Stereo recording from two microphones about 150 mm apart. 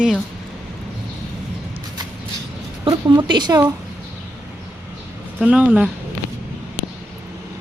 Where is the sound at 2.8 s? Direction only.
30° right (ahead or behind).